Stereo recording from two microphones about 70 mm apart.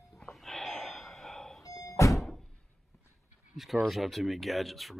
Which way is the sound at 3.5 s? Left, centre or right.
Centre.